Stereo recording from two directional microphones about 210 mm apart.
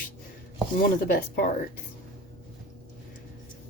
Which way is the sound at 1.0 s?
45° left (ahead or behind).